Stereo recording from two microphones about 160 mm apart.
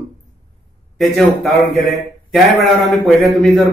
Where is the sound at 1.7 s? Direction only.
Centre (ahead or behind).